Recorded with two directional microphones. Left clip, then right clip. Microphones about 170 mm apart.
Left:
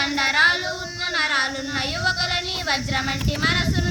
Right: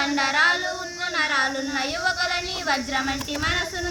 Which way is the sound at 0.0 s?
25° left (ahead or behind).